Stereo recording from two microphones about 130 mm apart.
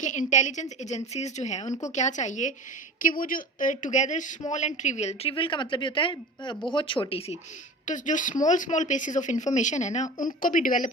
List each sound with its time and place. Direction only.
0.0 s a woman's voice: 70° left (ahead or behind)
3.0 s speech: 90° left; by 5.3 s 60° left (ahead or behind)
5.3 s speech: 40° left (ahead or behind)
7.9 s speech: 75° left (ahead or behind)
10.4 s a woman's voice: 90° left